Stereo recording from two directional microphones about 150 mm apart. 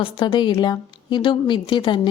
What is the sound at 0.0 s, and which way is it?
A woman's voice, 35° left (ahead or behind).